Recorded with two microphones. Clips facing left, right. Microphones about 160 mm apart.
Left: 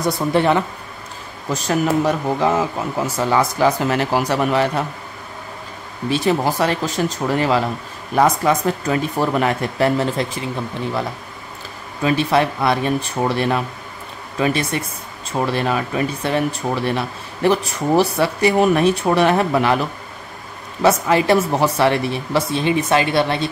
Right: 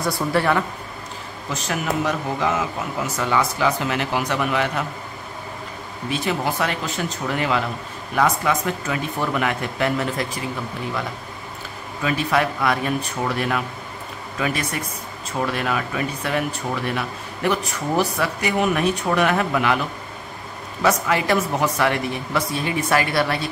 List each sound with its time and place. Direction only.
0.0 s speech: 20° left (ahead or behind)
1.5 s speech: 35° left (ahead or behind)
6.0 s speech: 35° left (ahead or behind)
12.0 s speech: 30° left (ahead or behind)
20.8 s speech: 30° left (ahead or behind)